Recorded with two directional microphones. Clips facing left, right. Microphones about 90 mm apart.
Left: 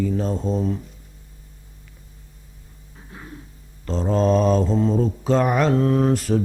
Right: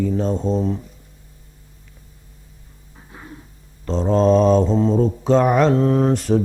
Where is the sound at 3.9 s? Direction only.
Centre (ahead or behind).